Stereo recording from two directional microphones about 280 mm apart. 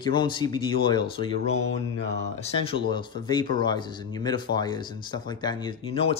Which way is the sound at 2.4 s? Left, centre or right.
Centre.